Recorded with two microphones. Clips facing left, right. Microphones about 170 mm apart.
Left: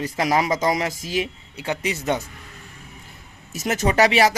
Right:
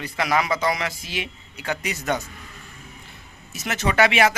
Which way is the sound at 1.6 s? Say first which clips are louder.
Left 2 dB; 25° left (ahead or behind).